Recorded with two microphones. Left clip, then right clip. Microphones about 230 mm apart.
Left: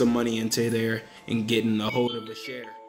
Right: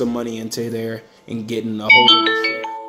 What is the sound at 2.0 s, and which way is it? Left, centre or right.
Music, right.